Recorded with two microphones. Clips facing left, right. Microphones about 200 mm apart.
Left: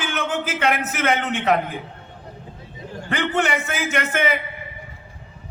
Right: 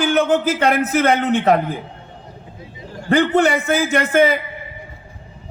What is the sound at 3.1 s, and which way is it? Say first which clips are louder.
A man's voice: right 8 dB; 35° right (ahead or behind).